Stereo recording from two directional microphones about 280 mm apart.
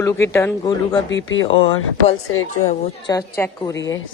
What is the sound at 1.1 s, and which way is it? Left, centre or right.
Speech, left.